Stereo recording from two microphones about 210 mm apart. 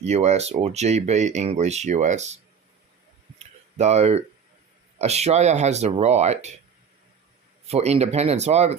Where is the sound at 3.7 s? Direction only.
30° right (ahead or behind).